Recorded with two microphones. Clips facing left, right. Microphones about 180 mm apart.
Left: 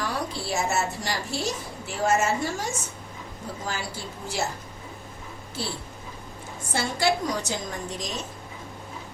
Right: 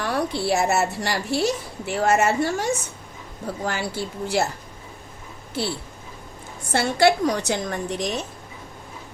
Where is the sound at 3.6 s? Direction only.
65° right (ahead or behind).